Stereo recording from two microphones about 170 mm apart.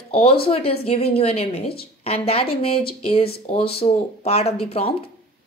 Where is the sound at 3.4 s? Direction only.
35° left (ahead or behind).